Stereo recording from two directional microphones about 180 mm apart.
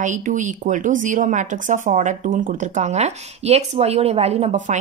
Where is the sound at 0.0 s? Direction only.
45° right (ahead or behind).